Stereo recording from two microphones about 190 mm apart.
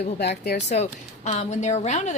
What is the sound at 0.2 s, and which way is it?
Speech, 60° left (ahead or behind).